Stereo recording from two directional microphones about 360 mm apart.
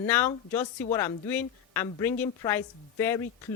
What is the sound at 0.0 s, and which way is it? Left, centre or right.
A woman's voice, centre.